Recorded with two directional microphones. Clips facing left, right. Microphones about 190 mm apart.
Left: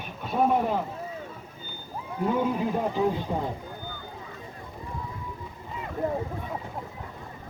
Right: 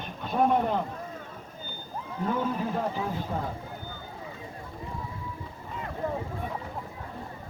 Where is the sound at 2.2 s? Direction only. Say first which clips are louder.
Left 3 dB; 15° left (ahead or behind).